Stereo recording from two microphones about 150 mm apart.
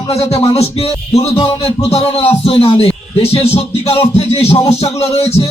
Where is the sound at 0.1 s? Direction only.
45° left (ahead or behind).